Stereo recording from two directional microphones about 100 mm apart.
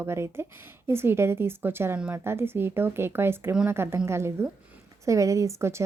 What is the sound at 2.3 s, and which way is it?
Speech, 25° right (ahead or behind).